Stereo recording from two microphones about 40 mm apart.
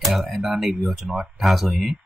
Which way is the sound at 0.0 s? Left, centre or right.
Centre.